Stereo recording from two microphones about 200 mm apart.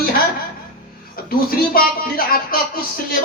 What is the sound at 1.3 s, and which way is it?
A man's voice, 45° left (ahead or behind).